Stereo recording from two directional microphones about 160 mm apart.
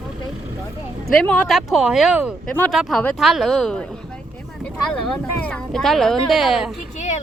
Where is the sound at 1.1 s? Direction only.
5° left (ahead or behind).